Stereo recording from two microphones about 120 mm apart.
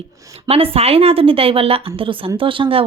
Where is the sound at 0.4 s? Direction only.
55° right (ahead or behind).